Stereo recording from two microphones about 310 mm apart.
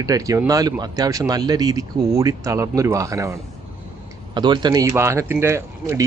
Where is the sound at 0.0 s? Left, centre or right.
Centre.